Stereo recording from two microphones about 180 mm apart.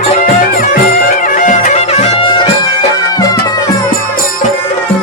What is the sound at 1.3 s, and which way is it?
Music, 40° left (ahead or behind).